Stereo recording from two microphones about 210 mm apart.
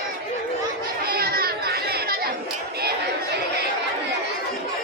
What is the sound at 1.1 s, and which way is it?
Chatter, 45° right (ahead or behind).